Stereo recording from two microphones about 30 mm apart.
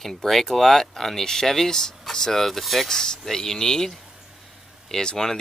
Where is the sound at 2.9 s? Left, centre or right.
Left.